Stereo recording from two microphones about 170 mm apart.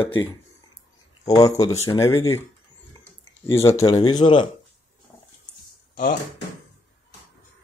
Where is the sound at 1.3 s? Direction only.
20° left (ahead or behind).